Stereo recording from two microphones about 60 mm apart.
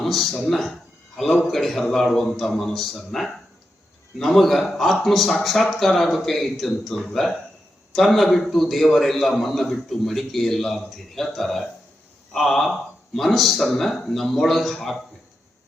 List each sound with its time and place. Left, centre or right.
0.0 s a man's voice: centre